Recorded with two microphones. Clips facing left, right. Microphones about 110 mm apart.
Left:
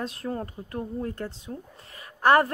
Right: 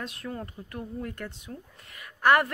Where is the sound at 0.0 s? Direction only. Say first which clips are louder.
Left 5 dB; 35° left (ahead or behind).